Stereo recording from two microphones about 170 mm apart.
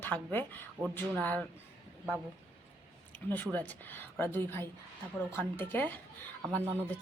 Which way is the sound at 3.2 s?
10° left (ahead or behind).